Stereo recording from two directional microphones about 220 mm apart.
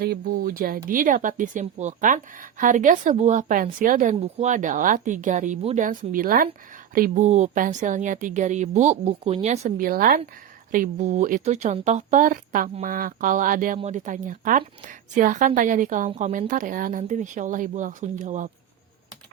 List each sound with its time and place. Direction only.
0.0 s speech: 45° right (ahead or behind)